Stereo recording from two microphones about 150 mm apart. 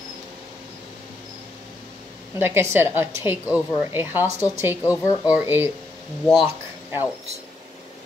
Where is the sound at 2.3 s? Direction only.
15° right (ahead or behind).